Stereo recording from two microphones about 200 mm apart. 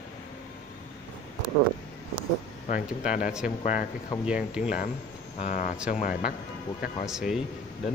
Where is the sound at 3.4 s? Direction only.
40° left (ahead or behind).